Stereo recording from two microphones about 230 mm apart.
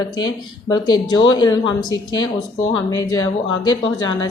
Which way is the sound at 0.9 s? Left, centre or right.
Centre.